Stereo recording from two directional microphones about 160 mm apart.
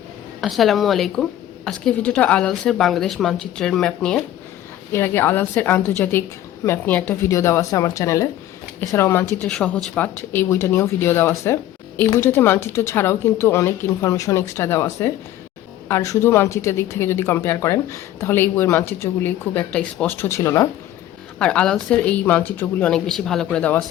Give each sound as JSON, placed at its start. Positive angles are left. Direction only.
{"t": 0.4, "sound": "a woman's voice", "side_deg": 0}
{"t": 4.9, "sound": "speech", "side_deg": 15}
{"t": 21.3, "sound": "speech", "side_deg": 5}